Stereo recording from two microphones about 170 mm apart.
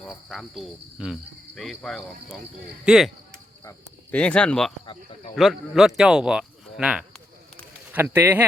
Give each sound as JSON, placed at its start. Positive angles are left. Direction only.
{"t": 0.0, "sound": "speech", "side_deg": 0}
{"t": 3.6, "sound": "cricket", "side_deg": 20}
{"t": 4.2, "sound": "speech", "side_deg": 5}